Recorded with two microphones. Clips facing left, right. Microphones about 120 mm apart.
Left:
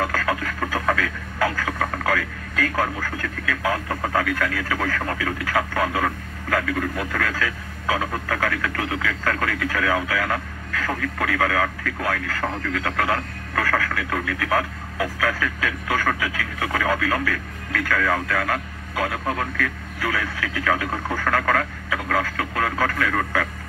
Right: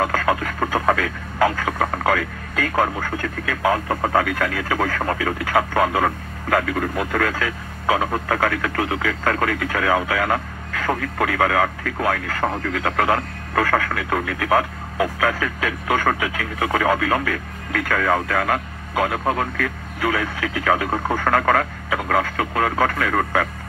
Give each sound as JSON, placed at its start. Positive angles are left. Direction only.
{"t": 0.0, "sound": "speech", "side_deg": -30}